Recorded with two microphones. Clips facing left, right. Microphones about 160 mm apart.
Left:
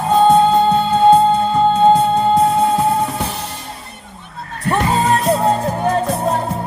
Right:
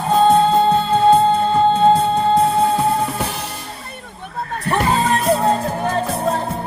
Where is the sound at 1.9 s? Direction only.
30° left (ahead or behind).